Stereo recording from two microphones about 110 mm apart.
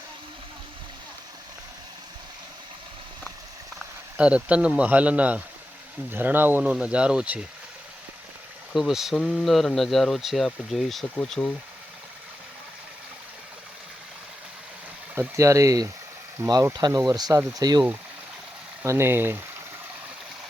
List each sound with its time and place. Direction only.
4.2 s speech: 10° right (ahead or behind)
8.7 s speech: 5° right (ahead or behind)
15.4 s speech: 30° right (ahead or behind)
17.1 s speech: 35° right (ahead or behind)
18.9 s speech: 20° right (ahead or behind)